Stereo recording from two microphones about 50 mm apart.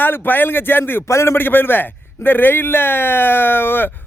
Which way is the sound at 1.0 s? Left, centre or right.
Left.